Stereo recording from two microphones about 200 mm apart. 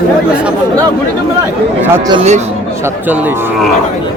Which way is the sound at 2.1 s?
30° right (ahead or behind).